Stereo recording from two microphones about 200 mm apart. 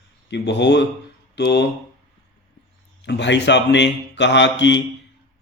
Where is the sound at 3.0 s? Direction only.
60° left (ahead or behind).